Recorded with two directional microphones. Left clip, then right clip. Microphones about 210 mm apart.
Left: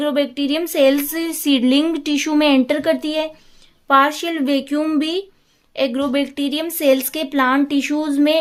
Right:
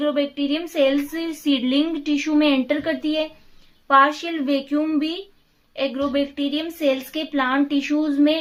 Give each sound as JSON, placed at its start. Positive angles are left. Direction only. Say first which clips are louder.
{"t": 0.0, "sound": "speech", "louder": "left 3 dB", "side_deg": 45}